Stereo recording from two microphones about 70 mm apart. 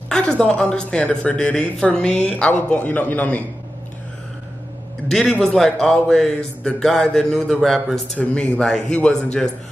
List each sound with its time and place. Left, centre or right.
0.1 s music: centre
0.5 s speech: centre
5.4 s speech: centre
8.2 s speech: centre